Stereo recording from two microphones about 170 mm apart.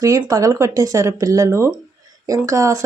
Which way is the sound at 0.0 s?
20° right (ahead or behind).